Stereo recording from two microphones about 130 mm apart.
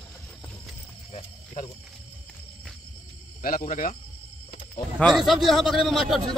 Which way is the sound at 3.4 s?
90° left.